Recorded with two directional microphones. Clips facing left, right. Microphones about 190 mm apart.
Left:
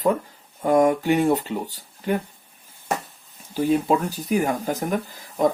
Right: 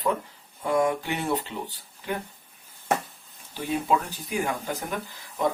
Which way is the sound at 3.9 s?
40° left (ahead or behind).